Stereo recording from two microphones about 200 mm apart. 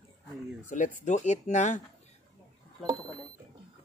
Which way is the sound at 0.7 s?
40° left (ahead or behind).